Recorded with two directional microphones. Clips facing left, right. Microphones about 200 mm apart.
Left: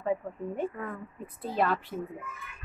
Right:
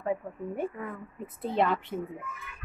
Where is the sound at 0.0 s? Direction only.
10° right (ahead or behind).